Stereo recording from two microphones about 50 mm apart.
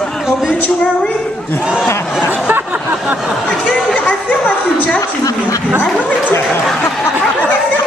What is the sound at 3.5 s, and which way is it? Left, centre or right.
Speech, centre.